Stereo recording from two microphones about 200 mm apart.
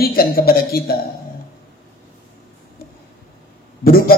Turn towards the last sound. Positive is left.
turn(degrees=45)  # may be behind; listen again after turning